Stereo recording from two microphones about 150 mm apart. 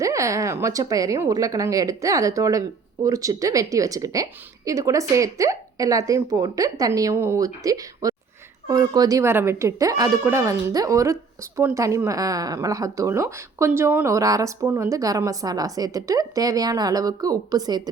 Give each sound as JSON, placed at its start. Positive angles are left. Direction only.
{"t": 0.0, "sound": "a woman's voice", "side_deg": -20}